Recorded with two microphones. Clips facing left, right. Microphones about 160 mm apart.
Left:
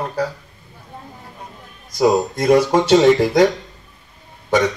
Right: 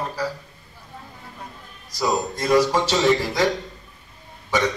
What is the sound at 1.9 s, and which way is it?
Speech, 55° left (ahead or behind).